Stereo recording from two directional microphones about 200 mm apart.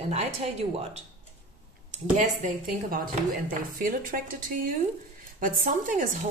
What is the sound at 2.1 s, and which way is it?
Speech, 40° right (ahead or behind).